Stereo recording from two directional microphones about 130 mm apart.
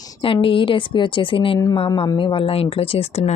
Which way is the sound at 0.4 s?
40° left (ahead or behind).